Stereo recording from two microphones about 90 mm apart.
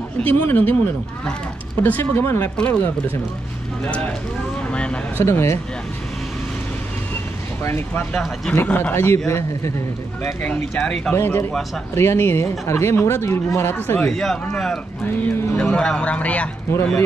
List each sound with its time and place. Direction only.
0.2 s speech: 20° left (ahead or behind)
1.8 s speech: 25° left (ahead or behind)
5.2 s speech: 30° left (ahead or behind)
7.6 s speech: 25° left (ahead or behind)
8.6 s speech: 15° left (ahead or behind)
8.9 s speech: 30° left (ahead or behind)
10.2 s speech: 25° left (ahead or behind)
10.8 s speech: 5° left (ahead or behind)
11.1 s speech: 25° left (ahead or behind)
14.0 s speech: 5° left (ahead or behind)
15.0 s speech: 25° left (ahead or behind)
15.6 s speech: 10° left (ahead or behind)
16.7 s speech: 30° left (ahead or behind)